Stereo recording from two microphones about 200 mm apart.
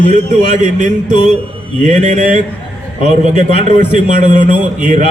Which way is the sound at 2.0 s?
40° right (ahead or behind).